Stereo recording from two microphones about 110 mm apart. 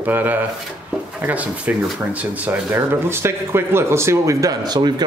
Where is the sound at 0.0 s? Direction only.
15° right (ahead or behind).